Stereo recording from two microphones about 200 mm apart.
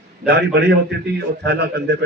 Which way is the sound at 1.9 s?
55° right (ahead or behind).